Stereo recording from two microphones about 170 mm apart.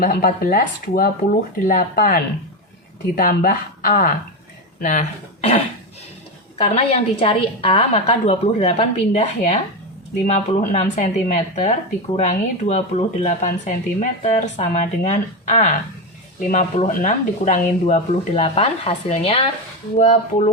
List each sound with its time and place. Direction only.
0.0 s speech: 60° left (ahead or behind)
4.8 s speech: 45° left (ahead or behind)
6.6 s speech: 40° left (ahead or behind)